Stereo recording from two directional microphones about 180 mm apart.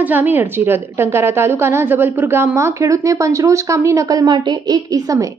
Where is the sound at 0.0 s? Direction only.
10° right (ahead or behind).